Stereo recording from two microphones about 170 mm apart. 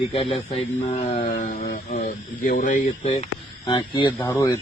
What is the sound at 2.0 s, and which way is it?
Speech, 50° left (ahead or behind).